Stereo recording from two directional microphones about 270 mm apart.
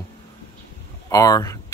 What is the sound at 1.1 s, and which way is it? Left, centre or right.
Speech, centre.